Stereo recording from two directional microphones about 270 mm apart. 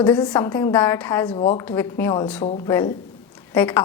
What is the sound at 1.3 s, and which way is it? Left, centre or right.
Speech, left.